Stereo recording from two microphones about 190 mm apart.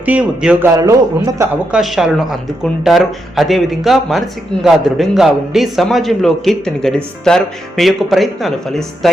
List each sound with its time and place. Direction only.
0.0 s speech: 5° right (ahead or behind)
1.7 s speech: centre (ahead or behind)